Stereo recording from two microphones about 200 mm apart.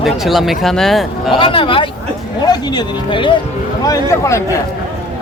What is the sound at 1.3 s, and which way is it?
Speech, 25° left (ahead or behind).